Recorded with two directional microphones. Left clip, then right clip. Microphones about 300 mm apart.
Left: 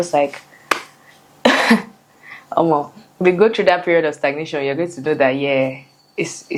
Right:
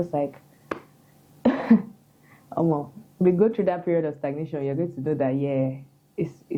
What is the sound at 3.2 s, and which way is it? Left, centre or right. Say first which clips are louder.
Speech: left 7 dB; centre.